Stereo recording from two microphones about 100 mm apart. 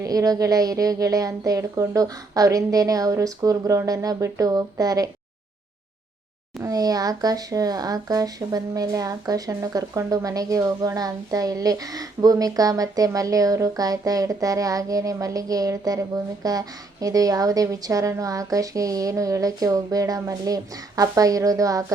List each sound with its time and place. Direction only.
0.0 s speech: 35° right (ahead or behind)
6.6 s speech: 35° right (ahead or behind)